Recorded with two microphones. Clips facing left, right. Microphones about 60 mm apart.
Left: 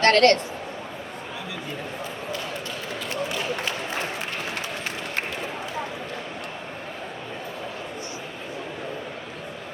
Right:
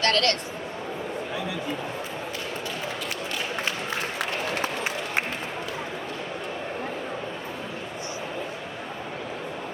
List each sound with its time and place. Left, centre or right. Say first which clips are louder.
0.0 s a woman's voice: left 7 dB; left